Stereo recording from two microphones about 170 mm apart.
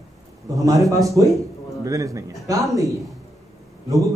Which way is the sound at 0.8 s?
20° right (ahead or behind).